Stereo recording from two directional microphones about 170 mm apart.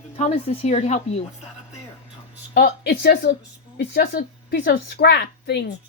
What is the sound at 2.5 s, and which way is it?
Speech, 70° left (ahead or behind).